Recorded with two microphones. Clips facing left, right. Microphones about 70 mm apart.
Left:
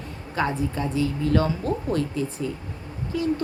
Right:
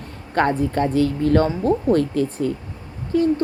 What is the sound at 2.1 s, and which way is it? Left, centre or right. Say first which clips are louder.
Speech: right 6 dB; right.